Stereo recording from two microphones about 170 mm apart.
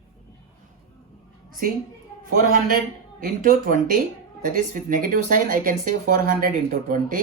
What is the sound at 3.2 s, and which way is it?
Speech, 55° right (ahead or behind).